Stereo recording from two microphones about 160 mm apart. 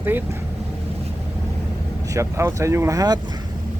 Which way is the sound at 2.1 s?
20° right (ahead or behind).